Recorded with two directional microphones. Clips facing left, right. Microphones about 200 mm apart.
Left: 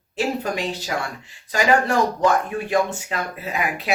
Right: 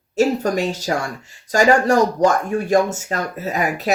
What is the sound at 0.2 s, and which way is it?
Speech, 45° right (ahead or behind).